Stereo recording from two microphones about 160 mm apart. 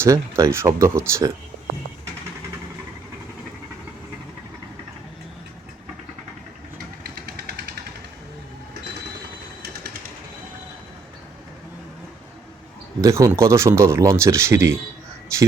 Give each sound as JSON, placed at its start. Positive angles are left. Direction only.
{"t": 0.0, "sound": "speech", "side_deg": -20}
{"t": 7.2, "sound": "vehicle", "side_deg": -80}
{"t": 13.0, "sound": "speech", "side_deg": -20}